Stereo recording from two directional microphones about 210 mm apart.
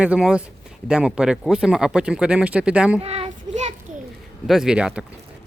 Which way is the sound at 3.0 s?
30° right (ahead or behind).